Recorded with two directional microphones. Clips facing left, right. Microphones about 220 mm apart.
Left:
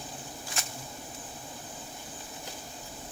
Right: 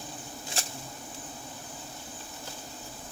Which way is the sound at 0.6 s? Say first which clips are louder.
Right 3 dB; 30° right (ahead or behind).